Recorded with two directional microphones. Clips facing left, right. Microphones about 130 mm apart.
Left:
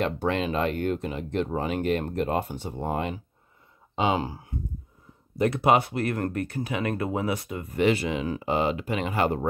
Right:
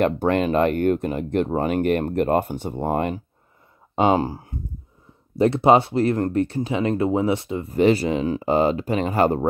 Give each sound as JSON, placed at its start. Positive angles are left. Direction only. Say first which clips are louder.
{"t": 0.0, "sound": "speech", "louder": "right 6 dB", "side_deg": -50}
{"t": 5.4, "sound": "speech", "louder": "right 6 dB", "side_deg": -30}